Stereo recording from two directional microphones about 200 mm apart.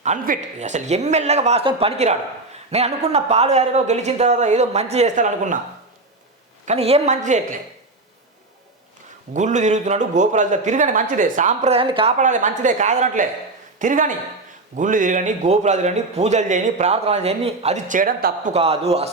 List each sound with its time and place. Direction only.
0.0 s a man's voice: 35° right (ahead or behind)
6.7 s a man's voice: 30° right (ahead or behind)
9.3 s a man's voice: 35° right (ahead or behind)
12.1 s a man's voice: 40° right (ahead or behind)
18.5 s a man's voice: 30° right (ahead or behind)